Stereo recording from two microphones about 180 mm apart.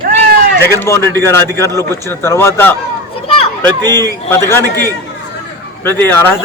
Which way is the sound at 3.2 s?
30° left (ahead or behind).